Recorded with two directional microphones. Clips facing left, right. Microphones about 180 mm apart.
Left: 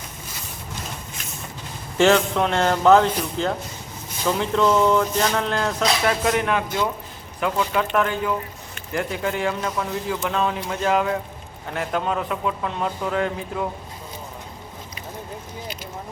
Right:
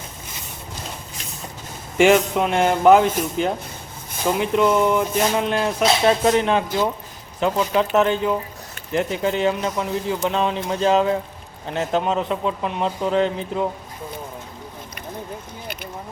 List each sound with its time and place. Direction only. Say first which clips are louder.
2.0 s speech: right 2 dB; 15° right (ahead or behind)
5.8 s a man's voice: right 5 dB; 25° right (ahead or behind)
15.6 s a sound: right 1 dB; 60° right (ahead or behind)